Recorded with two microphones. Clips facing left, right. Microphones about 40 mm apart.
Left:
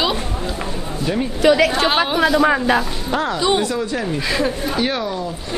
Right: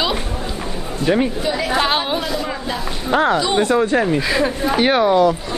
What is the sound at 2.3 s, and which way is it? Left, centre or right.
Speech, left.